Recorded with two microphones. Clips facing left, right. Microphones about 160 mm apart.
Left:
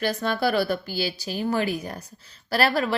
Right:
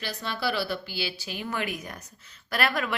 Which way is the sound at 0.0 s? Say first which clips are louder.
Left 7 dB; 50° left (ahead or behind).